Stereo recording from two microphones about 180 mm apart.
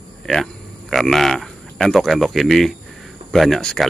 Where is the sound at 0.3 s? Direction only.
Centre (ahead or behind).